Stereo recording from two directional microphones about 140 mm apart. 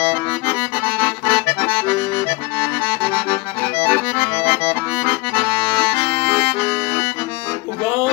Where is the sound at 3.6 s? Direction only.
10° left (ahead or behind).